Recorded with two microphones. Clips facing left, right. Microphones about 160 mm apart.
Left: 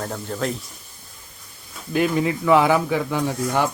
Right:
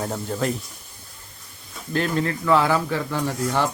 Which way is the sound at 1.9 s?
10° left (ahead or behind).